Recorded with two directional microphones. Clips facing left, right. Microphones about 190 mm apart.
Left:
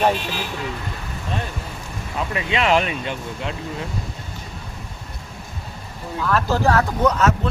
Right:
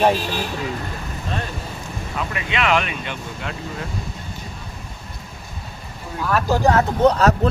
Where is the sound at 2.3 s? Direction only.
35° left (ahead or behind).